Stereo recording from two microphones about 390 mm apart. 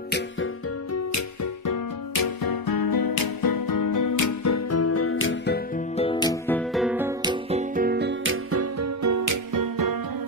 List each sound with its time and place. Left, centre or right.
1.7 s music: left
5.9 s music: centre; by 9.9 s right